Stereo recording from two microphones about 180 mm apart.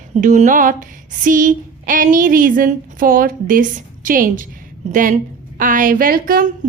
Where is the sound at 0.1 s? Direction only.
40° right (ahead or behind).